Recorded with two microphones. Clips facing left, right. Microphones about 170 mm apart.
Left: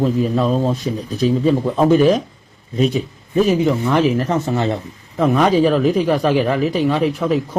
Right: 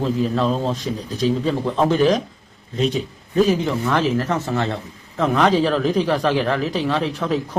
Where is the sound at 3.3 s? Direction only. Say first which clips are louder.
Left 3 dB; 10° left (ahead or behind).